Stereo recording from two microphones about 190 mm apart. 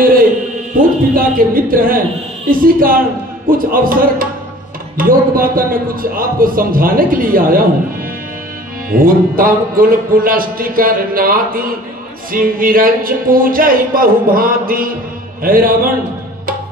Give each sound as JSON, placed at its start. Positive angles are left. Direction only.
{"t": 1.1, "sound": "music", "side_deg": -50}
{"t": 8.9, "sound": "music", "side_deg": -50}